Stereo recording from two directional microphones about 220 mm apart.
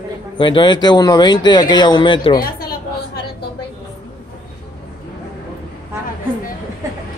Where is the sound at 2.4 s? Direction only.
45° left (ahead or behind).